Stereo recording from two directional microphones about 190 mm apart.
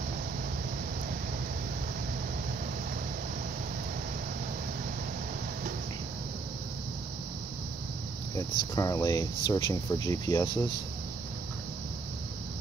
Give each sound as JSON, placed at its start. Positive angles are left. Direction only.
{"t": 8.4, "sound": "speech", "side_deg": 20}